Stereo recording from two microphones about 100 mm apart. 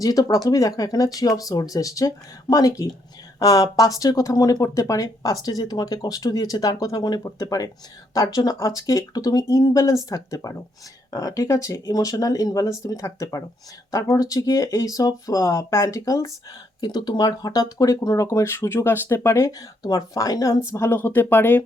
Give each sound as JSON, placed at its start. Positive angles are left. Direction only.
{"t": 0.0, "sound": "speech", "side_deg": 35}
{"t": 16.8, "sound": "speech", "side_deg": 45}
{"t": 20.7, "sound": "speech", "side_deg": 25}